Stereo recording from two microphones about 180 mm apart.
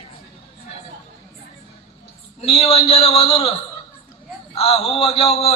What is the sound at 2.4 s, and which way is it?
A man's voice, 35° left (ahead or behind).